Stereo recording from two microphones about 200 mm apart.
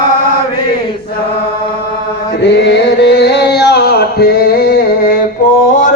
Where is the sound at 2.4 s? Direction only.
60° left (ahead or behind).